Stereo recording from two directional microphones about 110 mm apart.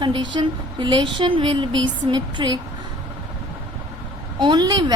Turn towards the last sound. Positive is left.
turn(degrees=-40)  # may be behind; listen again after turning